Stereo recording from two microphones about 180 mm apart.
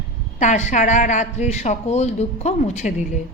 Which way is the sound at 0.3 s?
40° left (ahead or behind).